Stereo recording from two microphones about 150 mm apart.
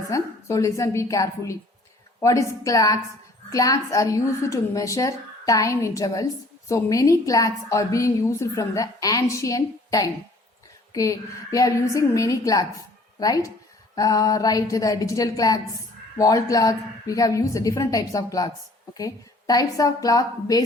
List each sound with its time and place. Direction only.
0.1 s a woman's voice: 20° left (ahead or behind)